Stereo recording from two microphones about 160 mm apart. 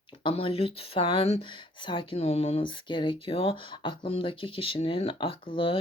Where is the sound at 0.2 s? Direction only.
35° left (ahead or behind).